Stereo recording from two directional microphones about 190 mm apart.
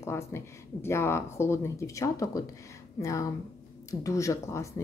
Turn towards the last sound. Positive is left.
turn(degrees=15)  # may be behind; listen again after turning